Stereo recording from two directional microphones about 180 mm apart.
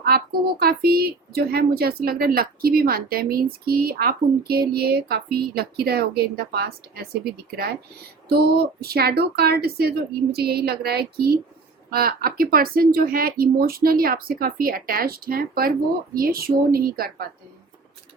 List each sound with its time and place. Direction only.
0.1 s a woman's voice: 60° right (ahead or behind)